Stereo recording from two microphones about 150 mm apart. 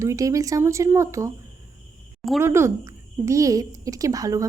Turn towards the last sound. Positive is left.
turn(degrees=-25)  # may be behind; listen again after turning